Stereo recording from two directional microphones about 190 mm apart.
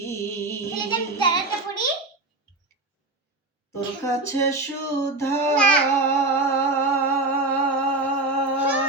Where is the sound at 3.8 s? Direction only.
15° left (ahead or behind).